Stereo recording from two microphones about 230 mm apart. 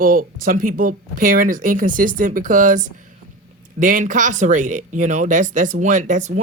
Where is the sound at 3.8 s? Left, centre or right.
Right.